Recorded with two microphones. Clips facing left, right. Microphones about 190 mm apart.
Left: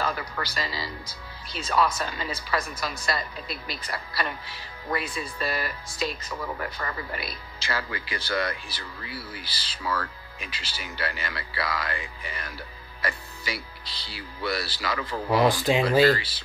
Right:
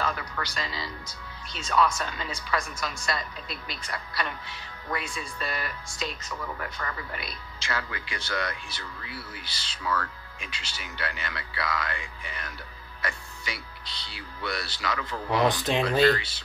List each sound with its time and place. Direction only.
0.0 s speech: 5° left (ahead or behind)